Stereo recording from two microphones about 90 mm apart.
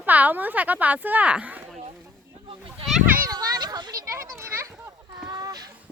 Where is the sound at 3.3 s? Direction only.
45° right (ahead or behind).